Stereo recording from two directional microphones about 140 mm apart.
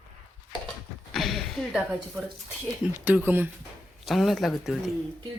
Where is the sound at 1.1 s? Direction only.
Centre (ahead or behind).